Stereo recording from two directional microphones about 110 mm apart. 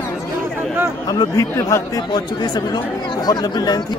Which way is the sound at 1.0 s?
35° left (ahead or behind).